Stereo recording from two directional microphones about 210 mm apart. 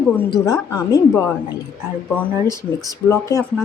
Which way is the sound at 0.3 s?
15° left (ahead or behind).